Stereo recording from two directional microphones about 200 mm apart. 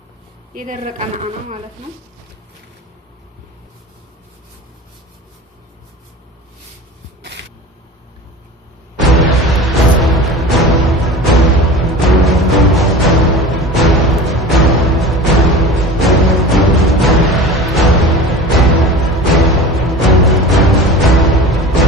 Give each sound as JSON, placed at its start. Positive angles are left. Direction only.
{"t": 0.5, "sound": "speech", "side_deg": -40}
{"t": 7.2, "sound": "a sound", "side_deg": -60}
{"t": 9.0, "sound": "music", "side_deg": 0}